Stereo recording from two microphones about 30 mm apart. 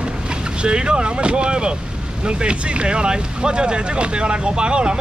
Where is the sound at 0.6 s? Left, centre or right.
Right.